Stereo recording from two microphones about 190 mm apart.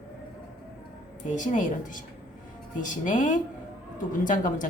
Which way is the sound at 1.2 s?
40° left (ahead or behind).